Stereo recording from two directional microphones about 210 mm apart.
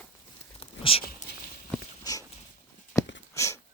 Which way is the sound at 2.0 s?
15° left (ahead or behind).